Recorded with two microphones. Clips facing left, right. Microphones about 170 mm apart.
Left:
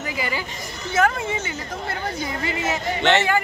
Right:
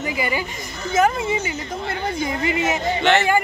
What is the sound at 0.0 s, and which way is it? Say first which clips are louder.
A woman's voice: right 4 dB; 15° right (ahead or behind).